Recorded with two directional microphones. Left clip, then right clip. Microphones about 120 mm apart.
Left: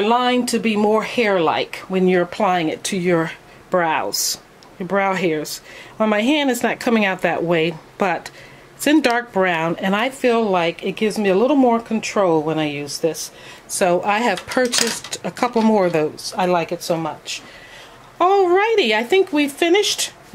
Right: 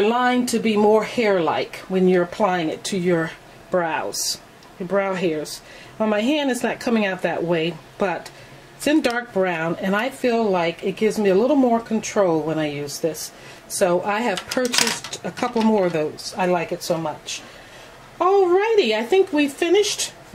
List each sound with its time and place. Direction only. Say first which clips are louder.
0.0 s speech: left 2 dB; 30° left (ahead or behind)
18.1 s speech: left 2 dB; 45° left (ahead or behind)